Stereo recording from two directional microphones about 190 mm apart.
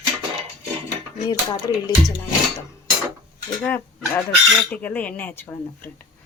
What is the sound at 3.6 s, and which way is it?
A woman's voice, 10° left (ahead or behind).